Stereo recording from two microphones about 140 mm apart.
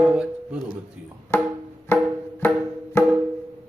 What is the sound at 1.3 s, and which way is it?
Music, 20° left (ahead or behind).